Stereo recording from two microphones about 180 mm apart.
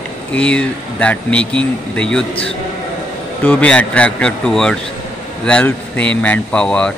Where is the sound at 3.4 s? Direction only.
10° left (ahead or behind).